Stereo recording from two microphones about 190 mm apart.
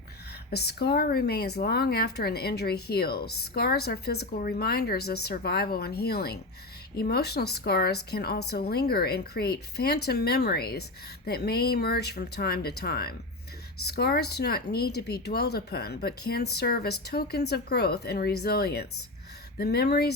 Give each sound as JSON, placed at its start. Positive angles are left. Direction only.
{"t": 0.5, "sound": "speech", "side_deg": 60}